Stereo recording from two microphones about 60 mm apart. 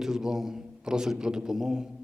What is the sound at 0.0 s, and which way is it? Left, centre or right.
A man's voice, centre.